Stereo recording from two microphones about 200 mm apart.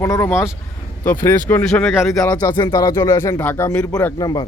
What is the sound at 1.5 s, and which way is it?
Speech, 10° left (ahead or behind).